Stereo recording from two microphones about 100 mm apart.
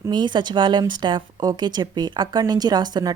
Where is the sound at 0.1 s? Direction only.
50° right (ahead or behind).